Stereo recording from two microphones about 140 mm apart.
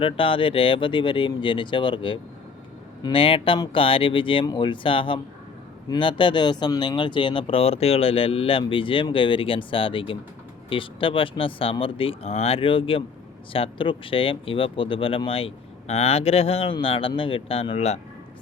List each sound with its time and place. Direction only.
0.0 s speech: 40° left (ahead or behind)